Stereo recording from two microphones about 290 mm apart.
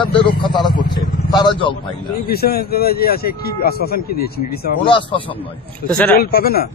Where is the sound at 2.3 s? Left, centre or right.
Left.